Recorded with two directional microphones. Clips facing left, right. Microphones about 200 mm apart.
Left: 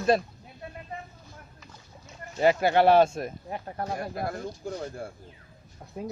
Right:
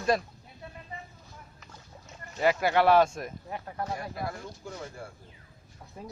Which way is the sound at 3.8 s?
50° left (ahead or behind).